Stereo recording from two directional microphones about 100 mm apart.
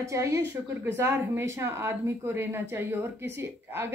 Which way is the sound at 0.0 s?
30° right (ahead or behind).